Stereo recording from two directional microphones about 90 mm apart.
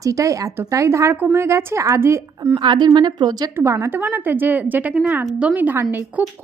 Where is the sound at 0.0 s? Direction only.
35° right (ahead or behind).